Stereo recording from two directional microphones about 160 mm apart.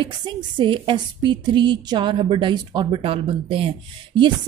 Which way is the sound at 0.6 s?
30° right (ahead or behind).